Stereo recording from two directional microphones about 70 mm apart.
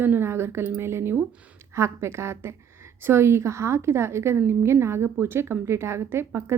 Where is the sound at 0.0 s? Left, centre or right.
Right.